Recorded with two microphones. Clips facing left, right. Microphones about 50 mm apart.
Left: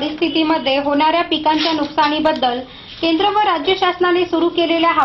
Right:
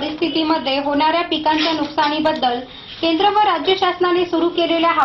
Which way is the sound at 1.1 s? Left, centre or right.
Left.